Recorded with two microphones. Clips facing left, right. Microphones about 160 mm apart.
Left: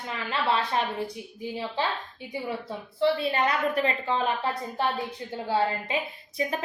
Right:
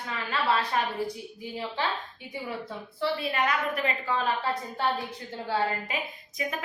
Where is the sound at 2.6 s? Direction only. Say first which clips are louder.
Left 7 dB; 25° left (ahead or behind).